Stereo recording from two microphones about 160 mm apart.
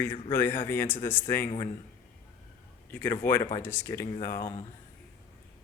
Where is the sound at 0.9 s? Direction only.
30° left (ahead or behind).